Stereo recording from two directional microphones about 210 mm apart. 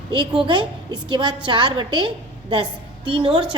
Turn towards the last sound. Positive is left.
turn(degrees=-25)  # may be behind; listen again after turning